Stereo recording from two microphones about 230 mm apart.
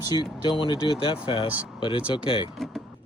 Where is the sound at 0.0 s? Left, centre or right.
Centre.